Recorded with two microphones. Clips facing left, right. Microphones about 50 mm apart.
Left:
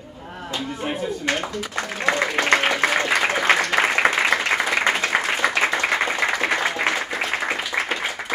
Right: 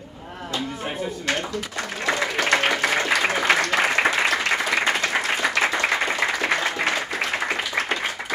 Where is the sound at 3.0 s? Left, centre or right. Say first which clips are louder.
Left 1 dB; centre.